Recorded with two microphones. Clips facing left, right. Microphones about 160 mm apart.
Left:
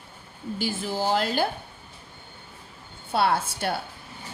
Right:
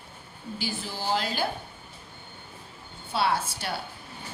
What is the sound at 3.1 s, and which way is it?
Speech, 50° left (ahead or behind).